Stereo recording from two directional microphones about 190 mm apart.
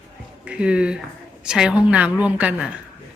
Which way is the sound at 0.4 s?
5° right (ahead or behind).